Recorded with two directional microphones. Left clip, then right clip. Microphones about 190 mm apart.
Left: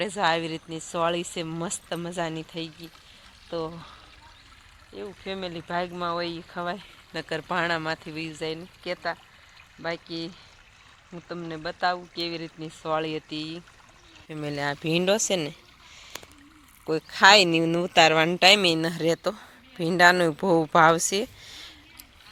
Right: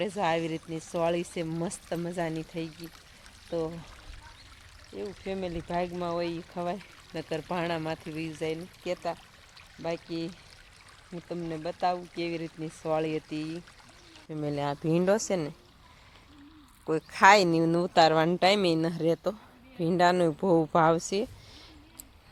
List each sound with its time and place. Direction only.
0.0 s speech: 5° left (ahead or behind)
5.2 s speech: 5° right (ahead or behind)
11.1 s speech: 35° left (ahead or behind)
11.4 s speech: centre (ahead or behind)
16.8 s speech: centre (ahead or behind)